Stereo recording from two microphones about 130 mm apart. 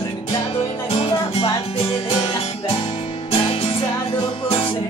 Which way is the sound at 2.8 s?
45° left (ahead or behind).